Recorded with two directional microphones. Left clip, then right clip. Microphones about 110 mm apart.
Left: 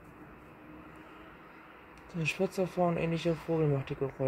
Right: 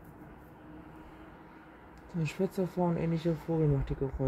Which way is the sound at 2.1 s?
40° right (ahead or behind).